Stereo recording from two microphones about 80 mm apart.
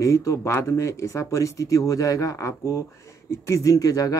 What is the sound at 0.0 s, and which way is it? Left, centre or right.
Speech, left.